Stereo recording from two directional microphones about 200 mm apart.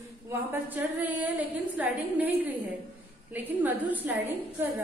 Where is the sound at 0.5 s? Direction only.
10° right (ahead or behind).